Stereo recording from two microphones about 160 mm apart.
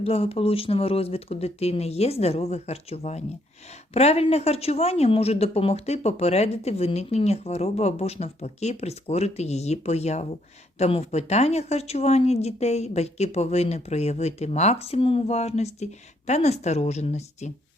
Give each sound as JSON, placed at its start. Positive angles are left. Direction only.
{"t": 0.0, "sound": "speech", "side_deg": 40}